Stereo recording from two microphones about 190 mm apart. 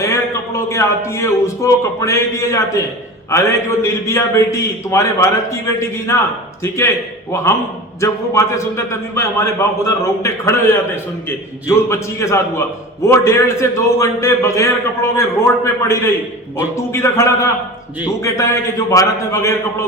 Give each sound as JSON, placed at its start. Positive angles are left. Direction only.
{"t": 0.0, "sound": "a man's voice", "side_deg": 15}
{"t": 8.0, "sound": "a man's voice", "side_deg": 15}
{"t": 11.9, "sound": "a man's voice", "side_deg": 15}